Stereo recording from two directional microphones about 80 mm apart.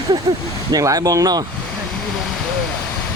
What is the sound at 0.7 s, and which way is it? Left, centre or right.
Speech, right.